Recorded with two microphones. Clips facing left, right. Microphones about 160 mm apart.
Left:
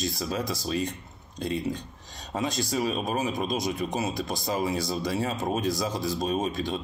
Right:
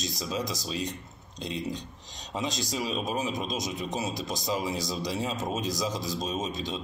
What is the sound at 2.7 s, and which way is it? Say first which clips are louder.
Speech: left 3 dB; 50° left (ahead or behind).